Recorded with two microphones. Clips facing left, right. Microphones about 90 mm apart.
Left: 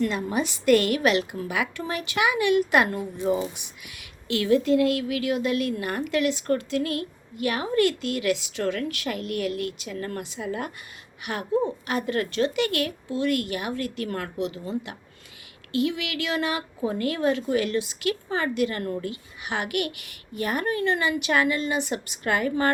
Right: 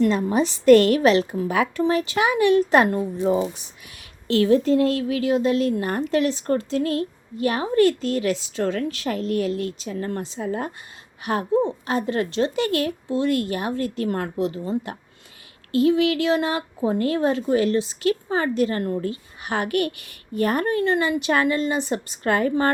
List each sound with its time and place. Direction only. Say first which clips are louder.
0.3 s speech: right 7 dB; 35° right (ahead or behind)